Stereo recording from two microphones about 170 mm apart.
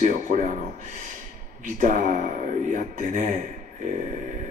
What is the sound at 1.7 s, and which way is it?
Speech, 50° right (ahead or behind).